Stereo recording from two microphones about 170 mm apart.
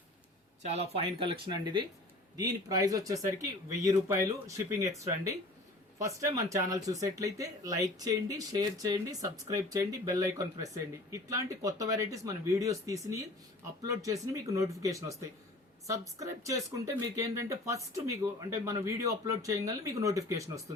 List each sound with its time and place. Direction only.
0.7 s speech: 35° right (ahead or behind); by 20.7 s 20° right (ahead or behind)